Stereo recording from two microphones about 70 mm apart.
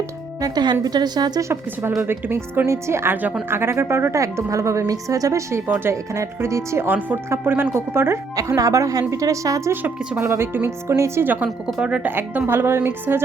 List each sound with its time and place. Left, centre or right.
0.4 s a woman's voice: right
1.4 s speech: right
2.0 s speech: right
2.6 s a woman's voice: right
5.6 s speech: right
5.9 s a woman's voice: right
6.8 s speech: right
8.4 s a woman's voice: right
9.8 s speech: right
11.2 s speech: right
11.8 s speech: centre
12.0 s speech: right